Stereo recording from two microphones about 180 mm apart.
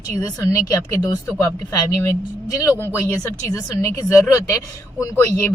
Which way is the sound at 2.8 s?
15° left (ahead or behind).